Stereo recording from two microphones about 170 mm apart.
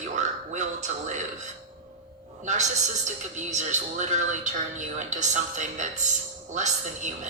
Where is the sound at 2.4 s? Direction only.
45° right (ahead or behind).